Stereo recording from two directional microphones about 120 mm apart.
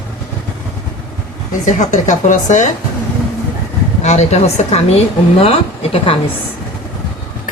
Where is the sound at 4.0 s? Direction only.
75° left (ahead or behind); by 6.2 s 50° left (ahead or behind).